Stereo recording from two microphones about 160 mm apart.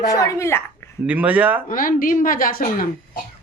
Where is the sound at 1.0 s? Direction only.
10° right (ahead or behind).